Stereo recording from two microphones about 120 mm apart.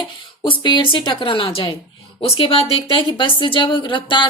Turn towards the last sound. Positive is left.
turn(degrees=40)  # may be behind; listen again after turning